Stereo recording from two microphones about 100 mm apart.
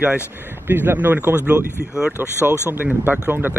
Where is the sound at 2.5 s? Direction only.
20° right (ahead or behind).